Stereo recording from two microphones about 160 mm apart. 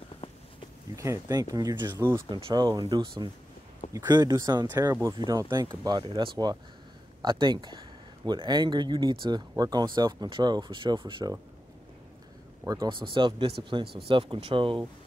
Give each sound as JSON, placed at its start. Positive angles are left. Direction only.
{"t": 0.9, "sound": "speech", "side_deg": -20}
{"t": 2.2, "sound": "speech", "side_deg": -30}
{"t": 12.6, "sound": "speech", "side_deg": -25}